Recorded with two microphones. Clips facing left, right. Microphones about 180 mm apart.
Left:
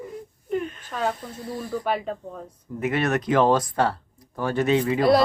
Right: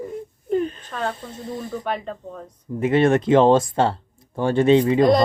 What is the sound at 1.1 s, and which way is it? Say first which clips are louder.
Speech: right 2 dB; 25° right (ahead or behind).